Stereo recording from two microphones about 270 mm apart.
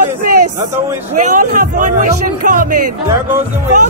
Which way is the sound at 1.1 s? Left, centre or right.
Right.